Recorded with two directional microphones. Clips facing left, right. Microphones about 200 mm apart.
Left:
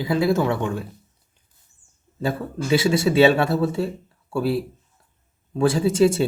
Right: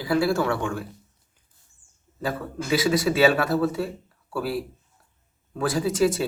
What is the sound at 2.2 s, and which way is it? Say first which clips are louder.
Speech: left 4 dB; 25° left (ahead or behind).